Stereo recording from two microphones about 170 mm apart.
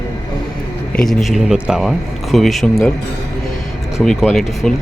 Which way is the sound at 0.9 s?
Centre (ahead or behind).